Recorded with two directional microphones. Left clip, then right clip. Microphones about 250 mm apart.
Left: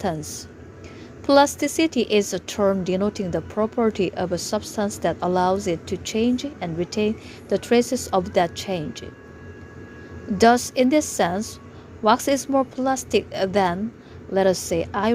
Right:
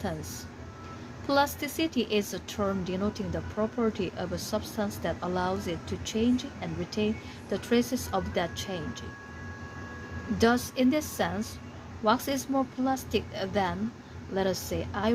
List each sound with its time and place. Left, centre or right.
0.0 s a woman's voice: left
10.3 s a woman's voice: left